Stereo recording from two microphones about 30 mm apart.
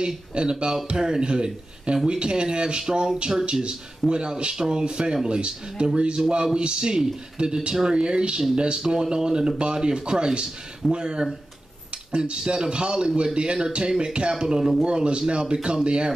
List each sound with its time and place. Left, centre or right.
0.0 s a man's voice: right
4.1 s a man's voice: right
5.9 s a man's voice: right